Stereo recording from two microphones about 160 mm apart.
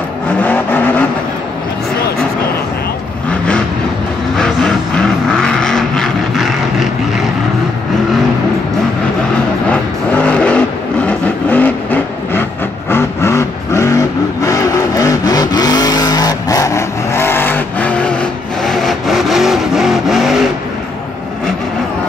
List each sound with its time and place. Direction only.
0.4 s vehicle: 10° left (ahead or behind)
3.3 s vehicle: 5° left (ahead or behind)
9.7 s vehicle: 10° left (ahead or behind)